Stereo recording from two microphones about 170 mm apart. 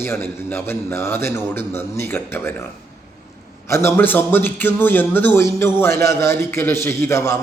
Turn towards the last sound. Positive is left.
turn(degrees=15)  # may be behind; listen again after turning